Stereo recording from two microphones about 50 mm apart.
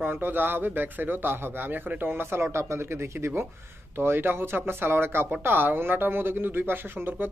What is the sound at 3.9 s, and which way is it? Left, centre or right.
Speech, right.